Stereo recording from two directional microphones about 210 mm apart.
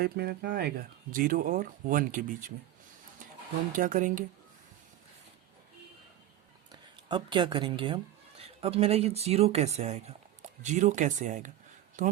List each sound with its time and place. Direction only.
0.0 s speech: 50° right (ahead or behind)
3.7 s speech: 40° right (ahead or behind)
6.7 s speech: 20° right (ahead or behind)